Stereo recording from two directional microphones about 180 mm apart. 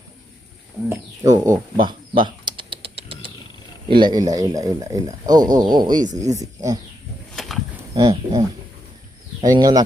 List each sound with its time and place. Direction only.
0.9 s typing: 20° right (ahead or behind)
3.8 s speech: 25° right (ahead or behind)
7.3 s a sound: centre (ahead or behind)
7.9 s speech: 25° right (ahead or behind)